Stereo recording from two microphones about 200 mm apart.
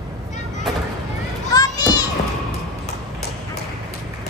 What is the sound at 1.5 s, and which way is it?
Children playing, 20° left (ahead or behind).